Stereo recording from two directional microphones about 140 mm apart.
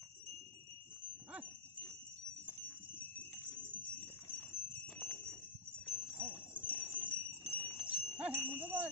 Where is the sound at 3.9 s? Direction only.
10° left (ahead or behind).